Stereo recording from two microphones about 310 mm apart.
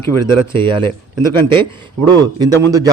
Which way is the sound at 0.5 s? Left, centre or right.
Centre.